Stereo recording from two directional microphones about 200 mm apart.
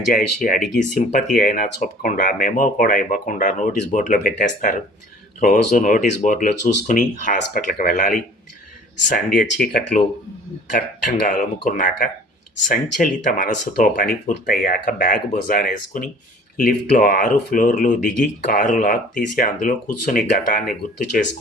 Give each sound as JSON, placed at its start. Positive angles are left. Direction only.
{"t": 0.1, "sound": "speech", "side_deg": 40}
{"t": 11.3, "sound": "speech", "side_deg": 40}